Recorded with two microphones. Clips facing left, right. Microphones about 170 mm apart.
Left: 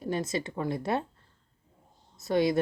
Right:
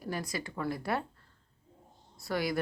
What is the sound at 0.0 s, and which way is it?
A woman's voice, 25° left (ahead or behind).